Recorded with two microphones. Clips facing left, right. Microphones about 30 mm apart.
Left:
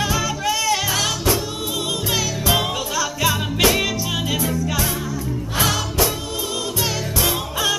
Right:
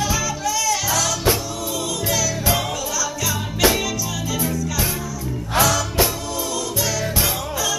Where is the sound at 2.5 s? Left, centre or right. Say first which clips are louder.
Left 2 dB; left.